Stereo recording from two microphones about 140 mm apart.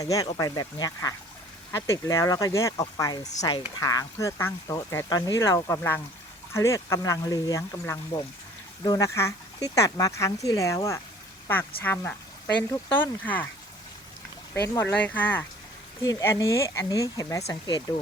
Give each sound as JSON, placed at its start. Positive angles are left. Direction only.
{"t": 0.0, "sound": "speech", "side_deg": 25}
{"t": 14.5, "sound": "speech", "side_deg": 20}